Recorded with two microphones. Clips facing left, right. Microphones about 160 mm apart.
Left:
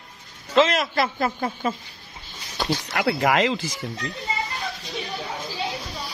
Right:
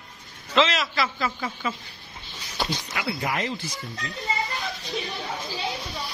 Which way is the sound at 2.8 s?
75° left (ahead or behind).